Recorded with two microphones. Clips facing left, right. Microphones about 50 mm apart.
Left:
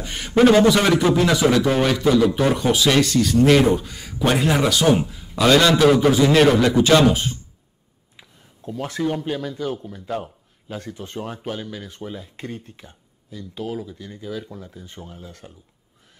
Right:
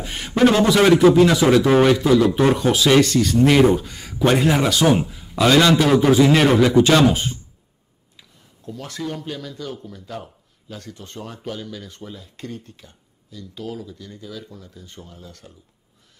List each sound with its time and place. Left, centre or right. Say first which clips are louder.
0.0 s a sound: right 1 dB; centre
0.7 s a man's voice: right 3 dB; centre
8.2 s speech: left 3 dB; left